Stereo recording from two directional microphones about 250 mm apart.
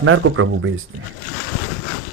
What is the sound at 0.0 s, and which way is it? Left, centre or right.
Speech, right.